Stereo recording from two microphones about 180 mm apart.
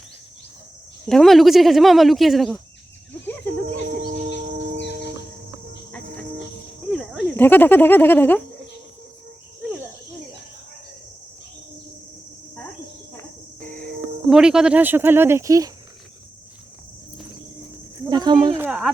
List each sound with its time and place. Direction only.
1.0 s speech: centre (ahead or behind)
6.9 s cricket: centre (ahead or behind)
7.3 s speech: 10° left (ahead or behind)
14.3 s speech: 5° right (ahead or behind)
18.1 s a sound: 25° right (ahead or behind)
18.5 s a sound: 10° right (ahead or behind)